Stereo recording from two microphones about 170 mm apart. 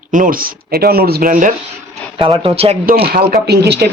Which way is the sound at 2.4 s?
35° right (ahead or behind).